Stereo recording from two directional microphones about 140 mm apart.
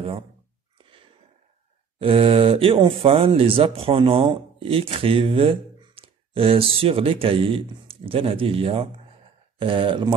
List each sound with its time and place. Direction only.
2.0 s speech: 40° right (ahead or behind)